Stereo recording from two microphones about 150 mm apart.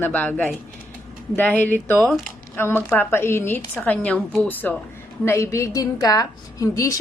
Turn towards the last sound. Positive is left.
turn(degrees=20)  # may be behind; listen again after turning